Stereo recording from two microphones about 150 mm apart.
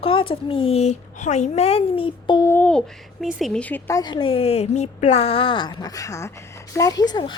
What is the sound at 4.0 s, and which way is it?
A woman's voice, 35° left (ahead or behind).